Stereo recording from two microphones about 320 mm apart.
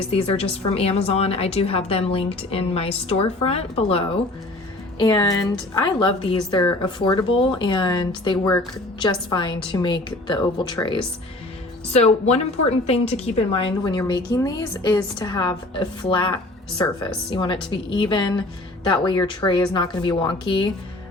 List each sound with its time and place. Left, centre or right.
0.1 s a woman's voice: centre